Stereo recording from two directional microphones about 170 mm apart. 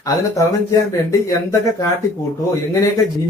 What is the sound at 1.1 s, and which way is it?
Speech, 20° left (ahead or behind).